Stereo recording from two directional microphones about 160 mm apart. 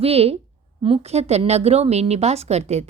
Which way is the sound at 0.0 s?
40° right (ahead or behind).